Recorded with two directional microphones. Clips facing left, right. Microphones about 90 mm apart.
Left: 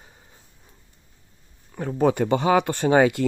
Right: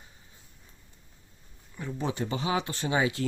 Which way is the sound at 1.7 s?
55° left (ahead or behind).